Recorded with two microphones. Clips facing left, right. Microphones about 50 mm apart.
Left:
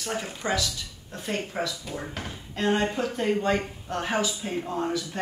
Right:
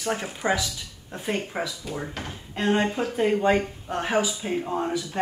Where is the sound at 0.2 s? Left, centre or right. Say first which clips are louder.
Right 3 dB; centre.